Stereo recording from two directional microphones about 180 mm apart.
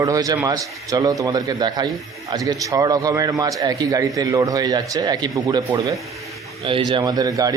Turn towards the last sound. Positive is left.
turn(degrees=-20)  # may be behind; listen again after turning